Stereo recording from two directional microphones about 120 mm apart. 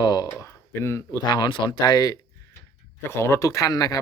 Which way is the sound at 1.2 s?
35° left (ahead or behind).